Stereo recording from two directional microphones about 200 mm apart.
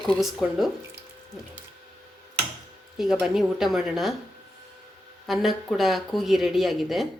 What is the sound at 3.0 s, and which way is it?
Speech, centre (ahead or behind).